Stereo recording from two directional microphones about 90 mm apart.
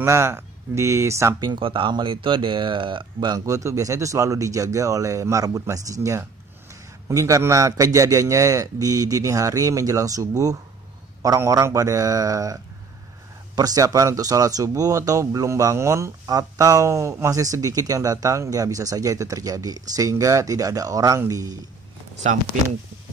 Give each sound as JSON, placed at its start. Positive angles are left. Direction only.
{"t": 0.0, "sound": "speech", "side_deg": -30}
{"t": 1.4, "sound": "speech", "side_deg": -65}
{"t": 3.3, "sound": "speech", "side_deg": -35}
{"t": 13.6, "sound": "speech", "side_deg": -45}